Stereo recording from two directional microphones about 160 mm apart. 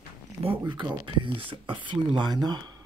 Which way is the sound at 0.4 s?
35° right (ahead or behind).